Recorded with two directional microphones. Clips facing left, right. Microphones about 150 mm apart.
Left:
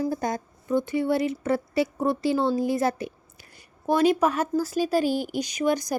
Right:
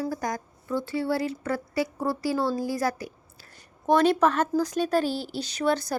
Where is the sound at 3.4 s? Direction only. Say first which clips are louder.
Right 2 dB; 10° left (ahead or behind).